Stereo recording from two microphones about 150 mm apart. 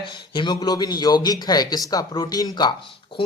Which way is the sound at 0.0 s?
30° left (ahead or behind).